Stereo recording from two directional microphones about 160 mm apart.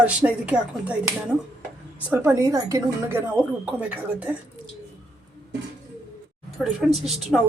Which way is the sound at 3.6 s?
5° right (ahead or behind).